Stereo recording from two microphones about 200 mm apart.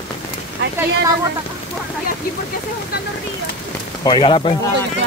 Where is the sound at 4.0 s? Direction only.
25° left (ahead or behind).